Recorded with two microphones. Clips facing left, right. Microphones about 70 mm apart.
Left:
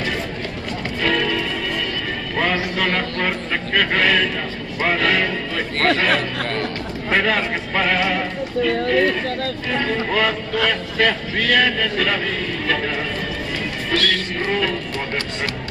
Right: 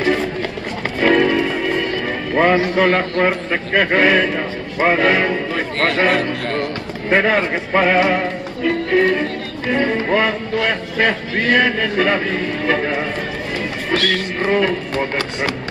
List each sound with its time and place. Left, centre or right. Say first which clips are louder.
1.0 s music: right 7 dB; right
13.9 s speech: right 2 dB; centre
14.4 s music: right 6 dB; right